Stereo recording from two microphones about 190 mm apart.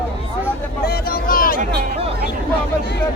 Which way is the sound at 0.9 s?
50° left (ahead or behind).